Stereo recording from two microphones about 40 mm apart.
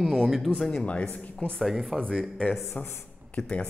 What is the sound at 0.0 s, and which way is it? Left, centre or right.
Speech, centre.